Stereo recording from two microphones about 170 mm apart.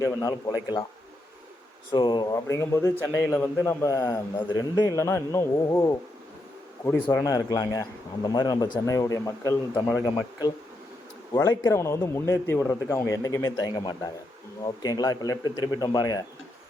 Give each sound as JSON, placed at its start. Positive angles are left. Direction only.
{"t": 0.0, "sound": "a man's voice", "side_deg": 15}
{"t": 1.9, "sound": "a man's voice", "side_deg": 30}
{"t": 11.3, "sound": "a man's voice", "side_deg": 20}